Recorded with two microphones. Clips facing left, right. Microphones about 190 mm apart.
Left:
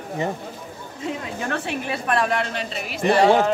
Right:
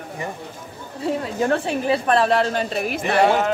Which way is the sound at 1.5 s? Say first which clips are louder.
Right 6 dB; 30° right (ahead or behind).